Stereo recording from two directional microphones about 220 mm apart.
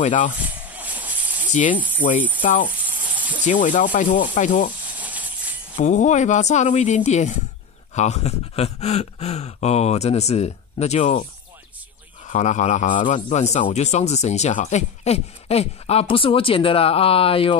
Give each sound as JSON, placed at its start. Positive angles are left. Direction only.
{"t": 0.0, "sound": "a man's voice", "side_deg": 35}
{"t": 0.7, "sound": "a sound", "side_deg": -5}
{"t": 1.5, "sound": "speech", "side_deg": 35}
{"t": 2.1, "sound": "speech", "side_deg": -5}
{"t": 2.4, "sound": "a man's voice", "side_deg": 35}
{"t": 2.7, "sound": "a sound", "side_deg": -5}
{"t": 3.4, "sound": "a man's voice", "side_deg": 35}
{"t": 4.9, "sound": "a sound", "side_deg": -5}
{"t": 5.8, "sound": "a man's voice", "side_deg": 35}
{"t": 12.3, "sound": "a man's voice", "side_deg": 35}